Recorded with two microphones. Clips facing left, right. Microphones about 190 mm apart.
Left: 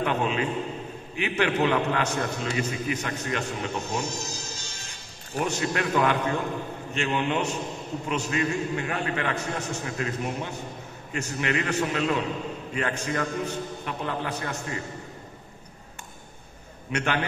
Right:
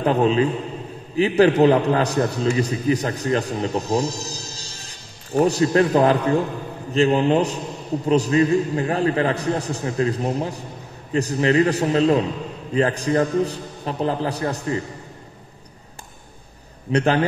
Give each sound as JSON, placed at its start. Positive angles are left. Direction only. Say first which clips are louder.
{"t": 0.0, "sound": "a man's voice", "louder": "right 8 dB", "side_deg": -35}
{"t": 16.9, "sound": "a man's voice", "louder": "right 9 dB", "side_deg": -35}